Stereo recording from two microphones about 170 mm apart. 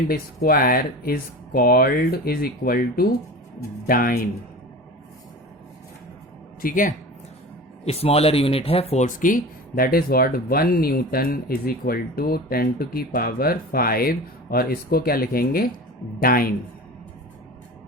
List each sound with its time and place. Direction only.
0.4 s speech: 60° left (ahead or behind)
6.6 s speech: 55° left (ahead or behind)
7.9 s speech: 35° left (ahead or behind); by 16.6 s 60° left (ahead or behind)